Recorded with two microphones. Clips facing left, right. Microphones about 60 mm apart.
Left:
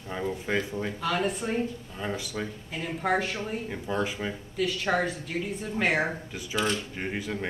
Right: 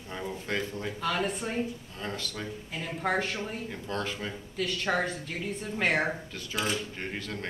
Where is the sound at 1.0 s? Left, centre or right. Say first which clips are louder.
Left 1 dB; centre.